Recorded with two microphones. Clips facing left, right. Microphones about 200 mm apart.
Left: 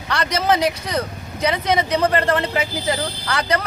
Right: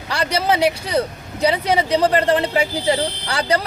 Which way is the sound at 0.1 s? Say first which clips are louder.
Right 1 dB; 30° right (ahead or behind).